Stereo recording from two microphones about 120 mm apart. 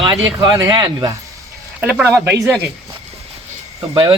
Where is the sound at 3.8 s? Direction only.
40° right (ahead or behind).